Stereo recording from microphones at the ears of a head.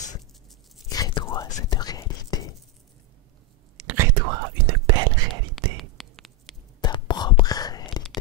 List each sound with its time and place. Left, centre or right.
0.8 s whispering: left
3.7 s whispering: right
6.8 s whispering: left